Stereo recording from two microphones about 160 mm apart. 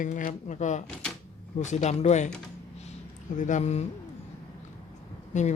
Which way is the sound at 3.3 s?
50° left (ahead or behind).